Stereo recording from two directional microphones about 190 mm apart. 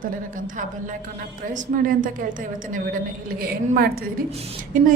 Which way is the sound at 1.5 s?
45° right (ahead or behind).